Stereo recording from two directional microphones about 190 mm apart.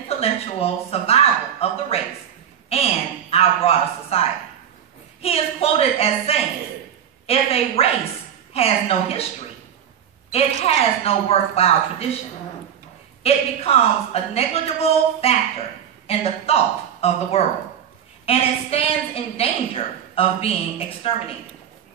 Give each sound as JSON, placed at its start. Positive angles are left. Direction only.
{"t": 0.2, "sound": "a woman's voice", "side_deg": 30}
{"t": 5.2, "sound": "a woman's voice", "side_deg": 30}
{"t": 10.3, "sound": "a woman's voice", "side_deg": 30}
{"t": 13.2, "sound": "a woman's voice", "side_deg": 30}